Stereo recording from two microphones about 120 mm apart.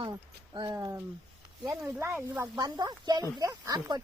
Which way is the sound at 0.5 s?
35° right (ahead or behind).